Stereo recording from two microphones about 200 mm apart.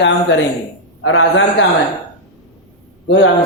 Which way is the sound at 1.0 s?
90° left.